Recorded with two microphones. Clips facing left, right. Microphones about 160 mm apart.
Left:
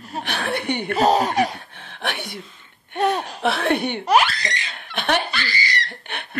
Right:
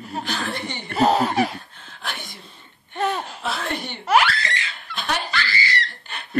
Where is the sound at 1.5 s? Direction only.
65° left (ahead or behind).